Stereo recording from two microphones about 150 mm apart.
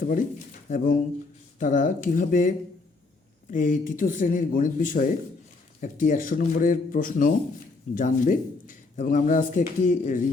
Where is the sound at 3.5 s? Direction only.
60° left (ahead or behind).